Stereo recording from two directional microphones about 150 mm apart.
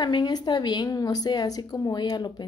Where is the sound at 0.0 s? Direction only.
30° left (ahead or behind).